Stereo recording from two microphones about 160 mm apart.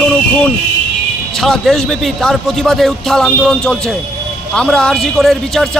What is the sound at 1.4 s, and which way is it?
Speech, centre (ahead or behind).